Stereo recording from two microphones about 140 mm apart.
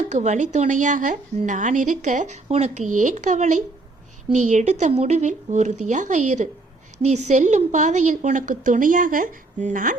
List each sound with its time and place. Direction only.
0.1 s a woman's voice: 55° right (ahead or behind)